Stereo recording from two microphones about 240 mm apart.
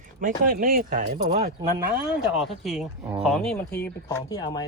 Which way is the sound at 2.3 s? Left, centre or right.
Centre.